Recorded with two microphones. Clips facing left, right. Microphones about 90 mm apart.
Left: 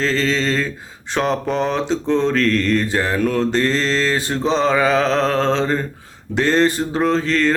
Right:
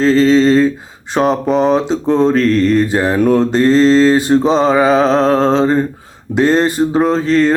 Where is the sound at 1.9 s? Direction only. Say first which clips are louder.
Right 5 dB; 40° right (ahead or behind).